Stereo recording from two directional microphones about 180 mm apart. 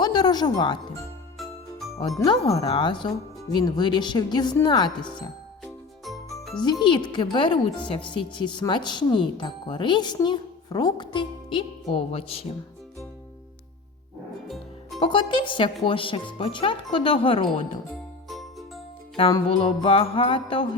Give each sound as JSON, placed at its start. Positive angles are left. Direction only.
{"t": 0.0, "sound": "speech", "side_deg": 25}
{"t": 1.4, "sound": "jingle", "side_deg": 0}
{"t": 2.0, "sound": "speech", "side_deg": 25}
{"t": 6.8, "sound": "speech", "side_deg": 25}
{"t": 14.4, "sound": "music", "side_deg": 0}
{"t": 14.9, "sound": "speech", "side_deg": 25}
{"t": 18.3, "sound": "music", "side_deg": 0}
{"t": 19.3, "sound": "speech", "side_deg": 25}